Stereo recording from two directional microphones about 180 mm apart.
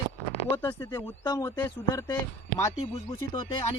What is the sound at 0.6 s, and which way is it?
Speech, 20° left (ahead or behind).